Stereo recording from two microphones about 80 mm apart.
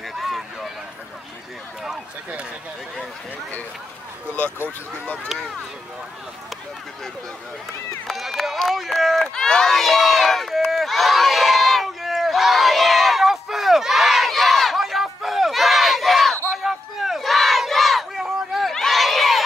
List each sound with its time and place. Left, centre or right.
0.1 s a sound: centre
4.6 s speech: centre
5.3 s speech: centre
8.1 s run: centre
16.6 s crowd: centre